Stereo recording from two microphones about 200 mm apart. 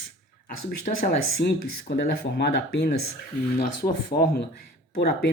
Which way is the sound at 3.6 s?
45° left (ahead or behind).